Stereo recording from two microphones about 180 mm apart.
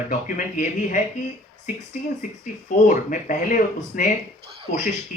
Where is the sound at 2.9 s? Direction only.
45° left (ahead or behind).